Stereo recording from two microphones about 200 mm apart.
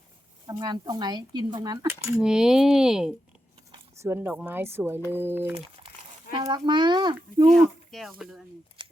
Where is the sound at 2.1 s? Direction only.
5° right (ahead or behind); by 7.5 s 20° right (ahead or behind).